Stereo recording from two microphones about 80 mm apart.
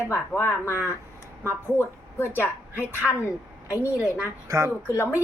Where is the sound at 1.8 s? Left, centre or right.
Left.